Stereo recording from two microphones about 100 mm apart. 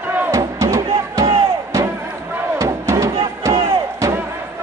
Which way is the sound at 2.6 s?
30° right (ahead or behind).